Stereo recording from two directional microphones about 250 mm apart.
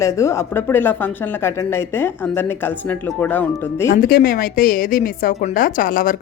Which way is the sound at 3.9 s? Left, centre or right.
Left.